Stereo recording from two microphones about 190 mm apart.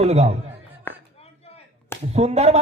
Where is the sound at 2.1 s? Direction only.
35° right (ahead or behind).